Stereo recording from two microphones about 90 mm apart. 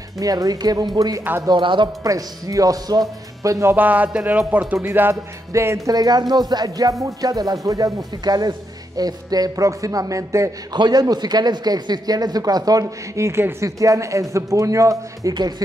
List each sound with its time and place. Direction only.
0.2 s speech: 45° right (ahead or behind)
1.6 s speech: 65° right (ahead or behind)
2.0 s speech: 40° right (ahead or behind)
3.7 s a man's voice: 20° right (ahead or behind)
5.9 s speech: 50° right (ahead or behind)
10.7 s speech: 50° right (ahead or behind)